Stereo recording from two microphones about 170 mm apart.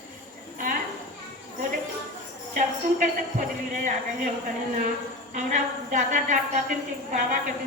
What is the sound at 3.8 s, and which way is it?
A woman's voice, 50° right (ahead or behind).